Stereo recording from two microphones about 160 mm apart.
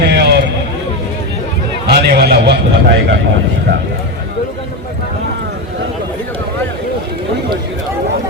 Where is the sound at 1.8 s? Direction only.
90° right.